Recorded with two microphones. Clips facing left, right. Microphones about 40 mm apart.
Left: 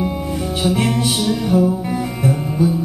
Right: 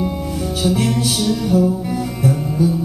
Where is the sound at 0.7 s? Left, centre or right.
Centre.